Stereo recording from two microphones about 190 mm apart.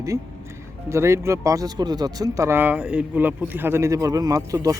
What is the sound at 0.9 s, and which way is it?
Speech, 15° right (ahead or behind).